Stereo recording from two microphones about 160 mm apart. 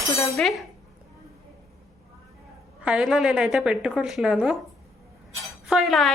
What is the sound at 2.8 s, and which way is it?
Speech, 5° right (ahead or behind).